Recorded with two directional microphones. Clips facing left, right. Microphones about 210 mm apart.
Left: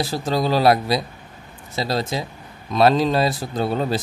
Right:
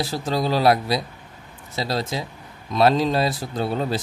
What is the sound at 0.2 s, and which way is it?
Speech, 45° left (ahead or behind).